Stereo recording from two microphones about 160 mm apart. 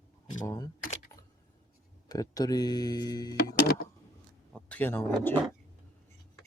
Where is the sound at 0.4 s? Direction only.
20° left (ahead or behind).